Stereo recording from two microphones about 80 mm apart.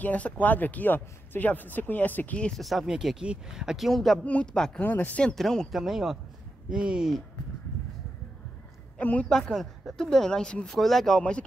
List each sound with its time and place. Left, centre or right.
0.0 s speech: centre
2.5 s speech: centre
4.2 s speech: centre
4.8 s speech: left
5.3 s speech: centre
8.9 s a woman's voice: centre